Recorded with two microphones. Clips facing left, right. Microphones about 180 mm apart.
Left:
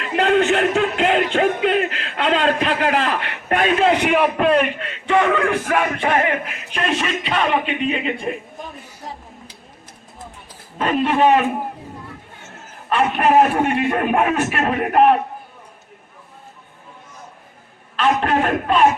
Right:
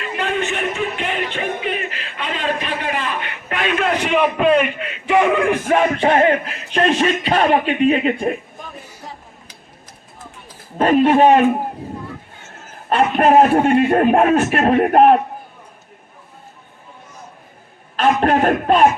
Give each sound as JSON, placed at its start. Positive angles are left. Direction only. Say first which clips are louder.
{"t": 0.3, "sound": "music", "louder": "left 7 dB", "side_deg": 90}
{"t": 3.5, "sound": "a sound", "louder": "left 4 dB", "side_deg": 45}
{"t": 4.0, "sound": "speech", "louder": "right 1 dB", "side_deg": 5}
{"t": 11.0, "sound": "a man's voice", "louder": "right 3 dB", "side_deg": -40}
{"t": 12.9, "sound": "a man's voice", "louder": "right 3 dB", "side_deg": -35}
{"t": 17.9, "sound": "a man's voice", "louder": "right 3 dB", "side_deg": -40}